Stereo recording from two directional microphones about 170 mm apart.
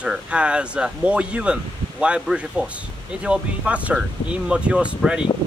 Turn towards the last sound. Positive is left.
turn(degrees=-5)  # may be behind; listen again after turning